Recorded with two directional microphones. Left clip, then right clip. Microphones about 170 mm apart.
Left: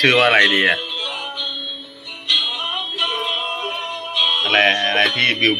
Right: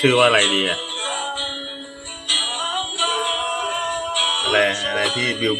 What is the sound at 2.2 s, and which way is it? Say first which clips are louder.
Music: left 3 dB; centre (ahead or behind).